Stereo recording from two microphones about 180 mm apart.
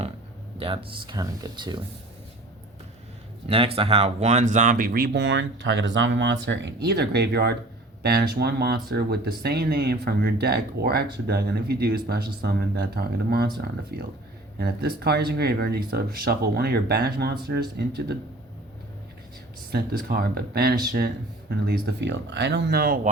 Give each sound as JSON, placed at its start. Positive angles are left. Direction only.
{"t": 0.6, "sound": "speech", "side_deg": -30}
{"t": 3.5, "sound": "speech", "side_deg": -30}
{"t": 19.7, "sound": "speech", "side_deg": -60}
{"t": 21.7, "sound": "speech", "side_deg": -70}